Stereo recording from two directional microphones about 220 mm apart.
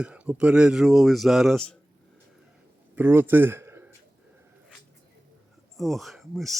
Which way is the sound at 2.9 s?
10° right (ahead or behind).